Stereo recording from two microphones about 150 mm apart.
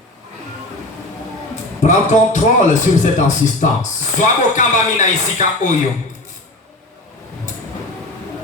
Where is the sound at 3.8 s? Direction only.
55° left (ahead or behind).